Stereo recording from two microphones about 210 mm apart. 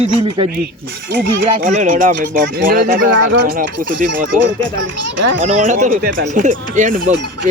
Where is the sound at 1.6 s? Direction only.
40° right (ahead or behind).